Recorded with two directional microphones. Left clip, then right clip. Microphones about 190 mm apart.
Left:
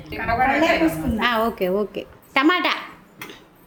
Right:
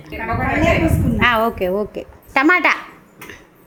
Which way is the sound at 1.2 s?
Centre (ahead or behind).